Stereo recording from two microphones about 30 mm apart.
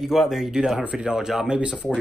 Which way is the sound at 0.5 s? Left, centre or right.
Right.